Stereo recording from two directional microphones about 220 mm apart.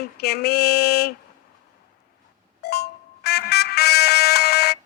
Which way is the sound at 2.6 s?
45° left (ahead or behind).